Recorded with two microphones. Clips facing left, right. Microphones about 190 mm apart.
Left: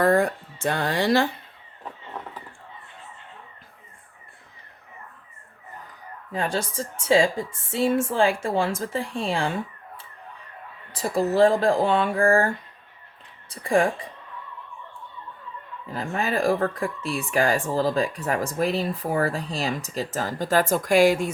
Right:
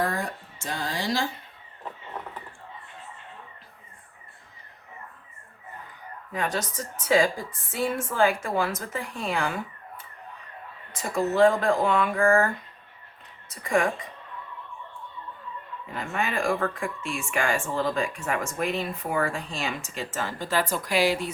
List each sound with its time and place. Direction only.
0.0 s speech: 60° left (ahead or behind)
6.3 s a woman's voice: 30° left (ahead or behind)
10.9 s speech: 35° left (ahead or behind)
15.9 s speech: 35° left (ahead or behind)